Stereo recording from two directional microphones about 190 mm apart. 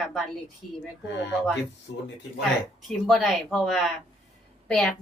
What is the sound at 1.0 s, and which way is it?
Speech, 65° left (ahead or behind).